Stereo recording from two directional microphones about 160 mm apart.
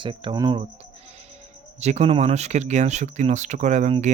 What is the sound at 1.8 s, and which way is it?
Speech, 45° right (ahead or behind).